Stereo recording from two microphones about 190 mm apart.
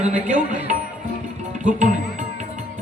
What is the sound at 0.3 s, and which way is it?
Speech, 40° right (ahead or behind).